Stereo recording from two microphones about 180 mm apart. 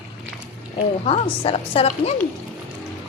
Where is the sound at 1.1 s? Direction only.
30° left (ahead or behind).